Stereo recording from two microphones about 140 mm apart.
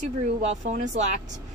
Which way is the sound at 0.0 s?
55° right (ahead or behind).